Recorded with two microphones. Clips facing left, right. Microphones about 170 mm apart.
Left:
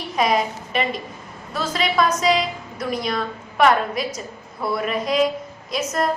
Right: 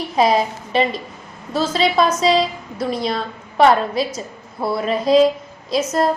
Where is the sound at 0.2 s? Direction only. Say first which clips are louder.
Right 4 dB; 30° right (ahead or behind).